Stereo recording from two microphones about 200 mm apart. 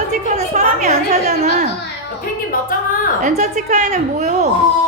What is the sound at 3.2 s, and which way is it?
A woman's voice, 35° right (ahead or behind).